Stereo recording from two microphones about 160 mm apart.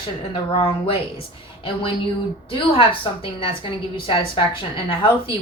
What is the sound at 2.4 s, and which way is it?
Speech, 35° left (ahead or behind).